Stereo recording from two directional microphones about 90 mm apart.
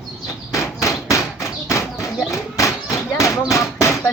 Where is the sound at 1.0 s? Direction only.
35° left (ahead or behind).